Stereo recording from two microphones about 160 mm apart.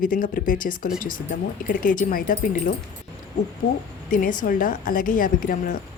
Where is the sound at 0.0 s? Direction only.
60° left (ahead or behind).